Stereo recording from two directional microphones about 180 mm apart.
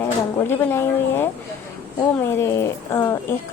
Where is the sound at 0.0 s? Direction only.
10° left (ahead or behind).